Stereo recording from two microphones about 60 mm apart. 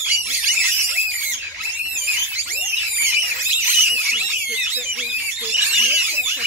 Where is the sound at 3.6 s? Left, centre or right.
Right.